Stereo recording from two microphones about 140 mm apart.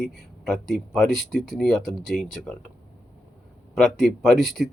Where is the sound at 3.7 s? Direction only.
Centre (ahead or behind).